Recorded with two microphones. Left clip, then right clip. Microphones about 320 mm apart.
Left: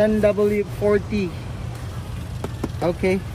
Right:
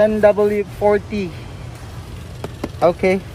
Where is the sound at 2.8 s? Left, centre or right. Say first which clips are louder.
Right 7 dB; right.